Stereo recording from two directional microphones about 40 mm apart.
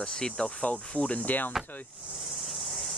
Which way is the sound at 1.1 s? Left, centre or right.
Left.